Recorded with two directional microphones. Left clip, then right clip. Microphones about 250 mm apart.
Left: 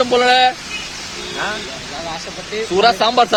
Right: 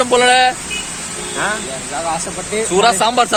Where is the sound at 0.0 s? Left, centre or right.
Centre.